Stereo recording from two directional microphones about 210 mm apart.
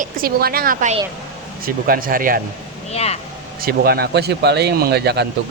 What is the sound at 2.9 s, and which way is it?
Speech, 30° left (ahead or behind).